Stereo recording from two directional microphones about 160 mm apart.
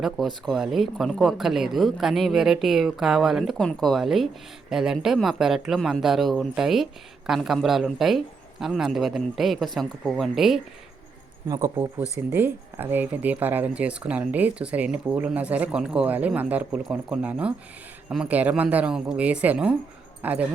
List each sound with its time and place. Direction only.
0.0 s speech: centre (ahead or behind)
11.4 s speech: 25° right (ahead or behind)
12.3 s speech: 10° right (ahead or behind)